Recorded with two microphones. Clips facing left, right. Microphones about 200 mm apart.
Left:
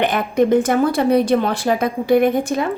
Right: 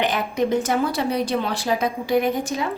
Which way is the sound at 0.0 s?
55° left (ahead or behind).